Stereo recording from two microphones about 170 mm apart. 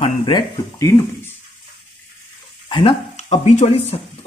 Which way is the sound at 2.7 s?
30° left (ahead or behind).